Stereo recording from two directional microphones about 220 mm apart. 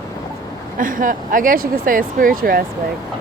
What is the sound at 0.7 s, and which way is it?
Speech, 40° right (ahead or behind).